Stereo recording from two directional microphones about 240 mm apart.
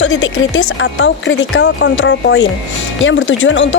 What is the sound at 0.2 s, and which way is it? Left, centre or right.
Speech, left.